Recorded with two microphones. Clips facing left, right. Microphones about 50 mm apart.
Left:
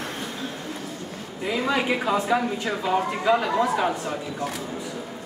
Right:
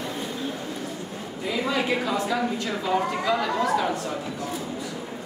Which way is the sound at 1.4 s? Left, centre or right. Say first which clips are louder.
Left 2 dB; centre.